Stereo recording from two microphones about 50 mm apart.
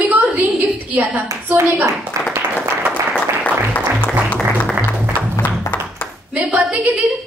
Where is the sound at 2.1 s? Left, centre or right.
Right.